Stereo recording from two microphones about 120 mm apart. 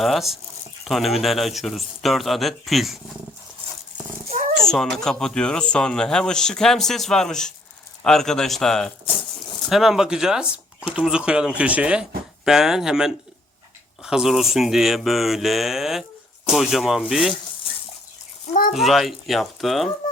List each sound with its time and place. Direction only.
0.0 s speech: centre (ahead or behind)
4.3 s cat: 90° right
4.7 s speech: 5° left (ahead or behind)
18.7 s speech: centre (ahead or behind)